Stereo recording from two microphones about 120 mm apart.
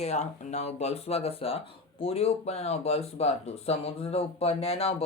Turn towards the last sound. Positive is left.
turn(degrees=55)  # may be behind; listen again after turning